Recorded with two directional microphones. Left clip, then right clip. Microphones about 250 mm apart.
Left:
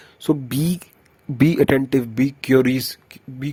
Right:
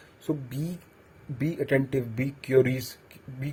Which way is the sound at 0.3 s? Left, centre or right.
Left.